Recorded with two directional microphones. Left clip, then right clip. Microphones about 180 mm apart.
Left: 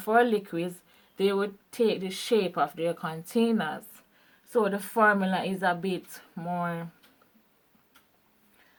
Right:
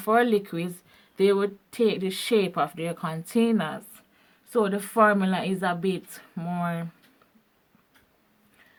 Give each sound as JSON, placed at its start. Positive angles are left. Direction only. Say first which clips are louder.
{"t": 0.0, "sound": "speech", "louder": "right 2 dB", "side_deg": -40}